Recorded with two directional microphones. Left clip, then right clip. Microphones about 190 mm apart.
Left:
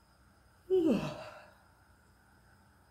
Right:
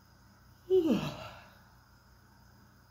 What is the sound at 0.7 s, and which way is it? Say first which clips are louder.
Gasp: right 1 dB; 20° left (ahead or behind).